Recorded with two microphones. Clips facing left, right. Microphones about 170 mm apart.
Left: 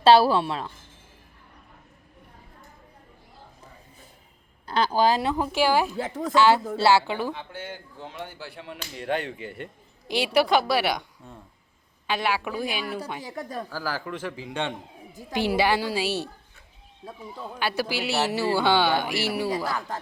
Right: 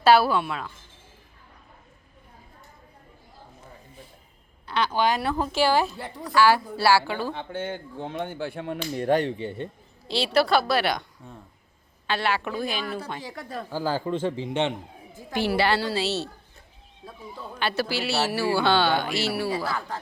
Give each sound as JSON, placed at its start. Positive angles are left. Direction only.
{"t": 0.0, "sound": "a woman's voice", "side_deg": 30}
{"t": 4.7, "sound": "a woman's voice", "side_deg": 35}
{"t": 5.2, "sound": "speech", "side_deg": 15}
{"t": 7.3, "sound": "speech", "side_deg": -55}
{"t": 10.1, "sound": "speech", "side_deg": 15}
{"t": 12.0, "sound": "speech", "side_deg": 10}
{"t": 13.7, "sound": "speech", "side_deg": -25}
{"t": 15.3, "sound": "speech", "side_deg": 15}
{"t": 17.6, "sound": "speech", "side_deg": 10}